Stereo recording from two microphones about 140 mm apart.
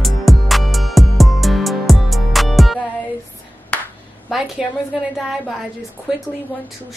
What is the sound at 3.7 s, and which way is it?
Clapping, 10° left (ahead or behind).